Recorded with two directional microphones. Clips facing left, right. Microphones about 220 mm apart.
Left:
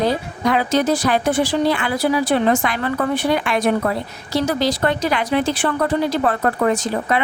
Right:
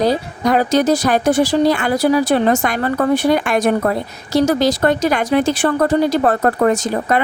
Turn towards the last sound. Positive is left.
turn(degrees=-45)  # may be behind; listen again after turning